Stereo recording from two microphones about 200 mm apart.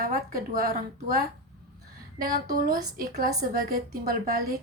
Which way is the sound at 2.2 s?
45° right (ahead or behind).